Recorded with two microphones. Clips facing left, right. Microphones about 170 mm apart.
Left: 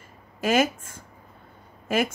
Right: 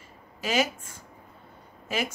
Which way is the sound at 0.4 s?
50° left (ahead or behind).